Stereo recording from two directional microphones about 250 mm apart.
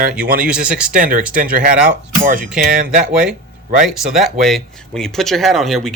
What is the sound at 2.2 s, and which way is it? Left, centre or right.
Speech, right.